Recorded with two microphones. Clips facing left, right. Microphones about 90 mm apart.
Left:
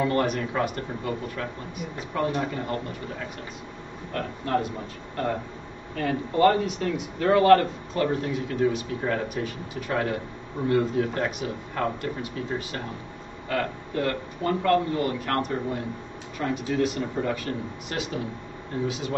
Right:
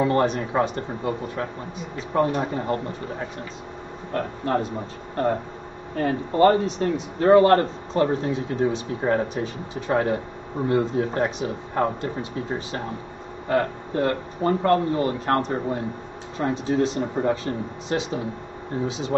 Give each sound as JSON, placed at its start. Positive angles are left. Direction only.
{"t": 0.0, "sound": "speech", "side_deg": -25}